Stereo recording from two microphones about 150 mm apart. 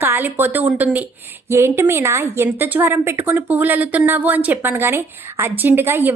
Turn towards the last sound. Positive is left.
turn(degrees=-15)  # may be behind; listen again after turning